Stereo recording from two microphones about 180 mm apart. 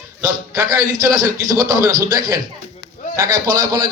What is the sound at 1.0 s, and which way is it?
Speech, 20° right (ahead or behind).